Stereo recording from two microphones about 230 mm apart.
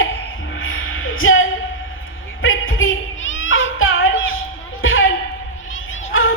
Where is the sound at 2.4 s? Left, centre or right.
Left.